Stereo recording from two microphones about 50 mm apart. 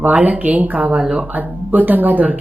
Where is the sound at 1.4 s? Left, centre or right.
Right.